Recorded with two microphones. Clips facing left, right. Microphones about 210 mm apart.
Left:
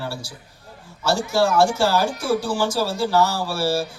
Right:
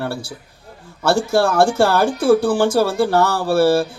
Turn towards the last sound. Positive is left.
turn(degrees=-55)  # may be behind; listen again after turning